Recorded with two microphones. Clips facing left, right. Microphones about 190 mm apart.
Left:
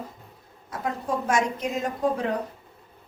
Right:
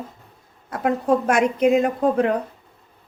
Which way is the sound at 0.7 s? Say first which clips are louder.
Right 9 dB; 65° right (ahead or behind).